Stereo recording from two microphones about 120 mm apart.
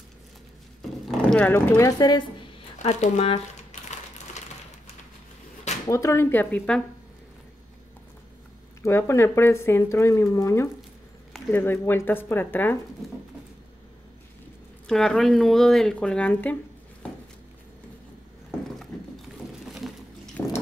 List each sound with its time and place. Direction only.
1.0 s a sound: 10° left (ahead or behind)
1.8 s speech: 30° left (ahead or behind)
2.8 s speech: 65° left (ahead or behind)
5.9 s speech: 25° left (ahead or behind)
8.8 s speech: 20° left (ahead or behind)
14.9 s speech: 5° left (ahead or behind)
18.8 s a sound: centre (ahead or behind)
20.4 s liquid: 15° left (ahead or behind)